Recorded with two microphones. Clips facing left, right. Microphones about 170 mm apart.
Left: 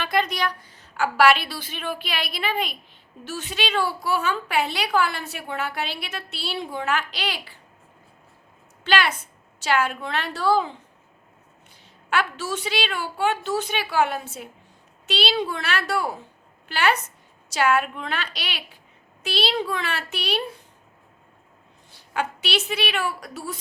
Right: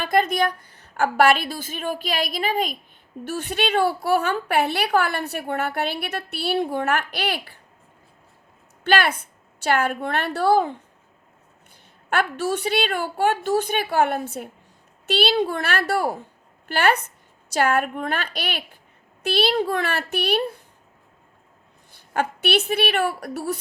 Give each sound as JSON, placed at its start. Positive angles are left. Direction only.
{"t": 0.0, "sound": "a woman's voice", "side_deg": -45}
{"t": 3.2, "sound": "a woman's voice", "side_deg": -55}
{"t": 8.8, "sound": "a woman's voice", "side_deg": -55}
{"t": 12.1, "sound": "a woman's voice", "side_deg": -55}
{"t": 21.9, "sound": "a woman's voice", "side_deg": -55}